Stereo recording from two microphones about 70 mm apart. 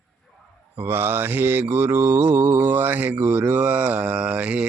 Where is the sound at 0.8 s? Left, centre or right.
Right.